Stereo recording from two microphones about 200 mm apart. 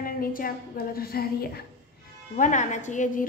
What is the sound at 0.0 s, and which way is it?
A woman's voice, 45° left (ahead or behind).